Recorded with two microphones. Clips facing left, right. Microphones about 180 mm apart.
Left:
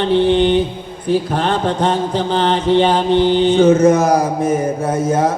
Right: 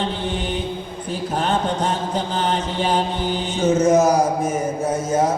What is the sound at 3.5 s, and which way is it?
Mantra, 55° left (ahead or behind).